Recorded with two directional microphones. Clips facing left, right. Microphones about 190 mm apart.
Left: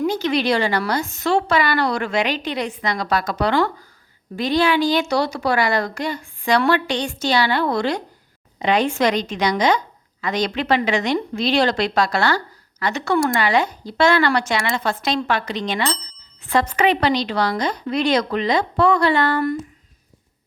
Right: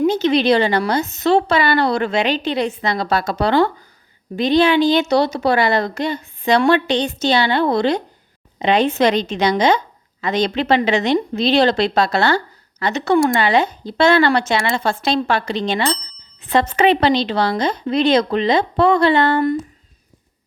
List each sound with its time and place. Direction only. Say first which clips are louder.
0.0 s a woman's voice: right 5 dB; 20° right (ahead or behind)